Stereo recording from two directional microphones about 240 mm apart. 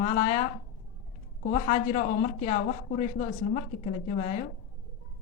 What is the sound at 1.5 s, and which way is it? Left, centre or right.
A woman's voice, left.